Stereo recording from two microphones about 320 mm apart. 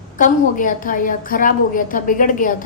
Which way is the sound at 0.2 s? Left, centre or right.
Left.